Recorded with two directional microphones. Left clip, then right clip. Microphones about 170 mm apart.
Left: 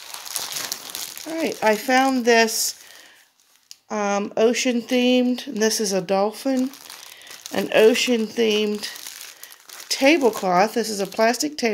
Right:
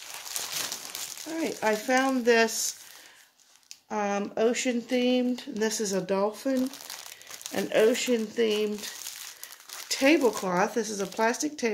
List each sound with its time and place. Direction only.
1.3 s speech: 50° left (ahead or behind)
3.9 s speech: 45° left (ahead or behind)
7.5 s speech: 50° left (ahead or behind)